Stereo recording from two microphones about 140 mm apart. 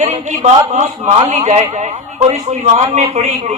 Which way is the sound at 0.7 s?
55° right (ahead or behind).